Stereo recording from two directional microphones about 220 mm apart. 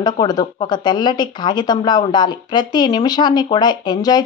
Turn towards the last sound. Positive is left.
turn(degrees=20)  # may be behind; listen again after turning